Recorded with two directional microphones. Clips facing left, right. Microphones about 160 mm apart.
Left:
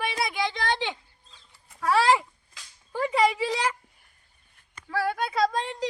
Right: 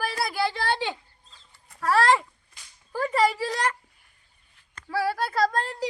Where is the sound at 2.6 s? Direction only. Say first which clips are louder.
Left 4 dB; 90° left.